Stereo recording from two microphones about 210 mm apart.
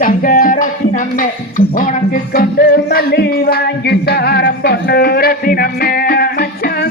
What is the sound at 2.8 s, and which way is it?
Music, 50° left (ahead or behind).